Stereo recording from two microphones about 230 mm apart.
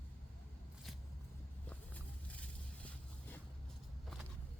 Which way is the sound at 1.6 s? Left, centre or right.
Centre.